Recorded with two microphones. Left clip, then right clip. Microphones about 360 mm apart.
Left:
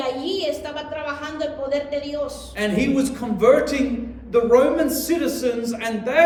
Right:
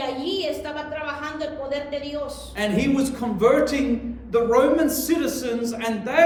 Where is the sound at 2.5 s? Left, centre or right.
Centre.